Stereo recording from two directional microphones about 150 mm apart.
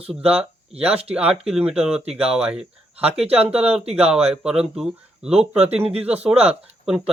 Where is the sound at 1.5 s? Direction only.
5° right (ahead or behind).